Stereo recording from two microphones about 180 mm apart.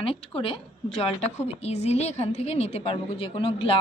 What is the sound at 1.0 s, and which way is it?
A woman's voice, 35° left (ahead or behind).